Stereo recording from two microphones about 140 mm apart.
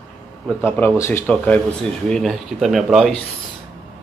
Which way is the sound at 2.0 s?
Centre (ahead or behind).